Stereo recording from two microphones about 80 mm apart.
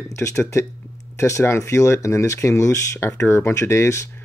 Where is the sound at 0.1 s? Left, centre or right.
Left.